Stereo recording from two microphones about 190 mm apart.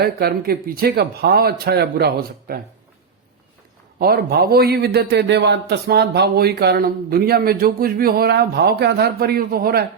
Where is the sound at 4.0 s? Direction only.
55° right (ahead or behind).